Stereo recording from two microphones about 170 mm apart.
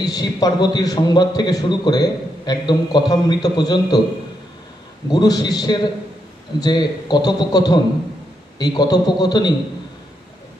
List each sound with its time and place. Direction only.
0.0 s a man's voice: 20° left (ahead or behind)
5.1 s a man's voice: 25° left (ahead or behind)